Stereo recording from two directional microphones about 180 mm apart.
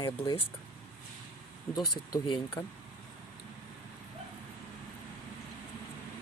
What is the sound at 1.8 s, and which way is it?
Speech, 25° left (ahead or behind).